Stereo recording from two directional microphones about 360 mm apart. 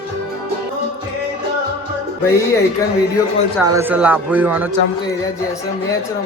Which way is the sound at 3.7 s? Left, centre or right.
Centre.